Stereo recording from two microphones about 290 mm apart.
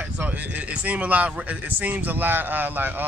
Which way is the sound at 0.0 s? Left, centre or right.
Centre.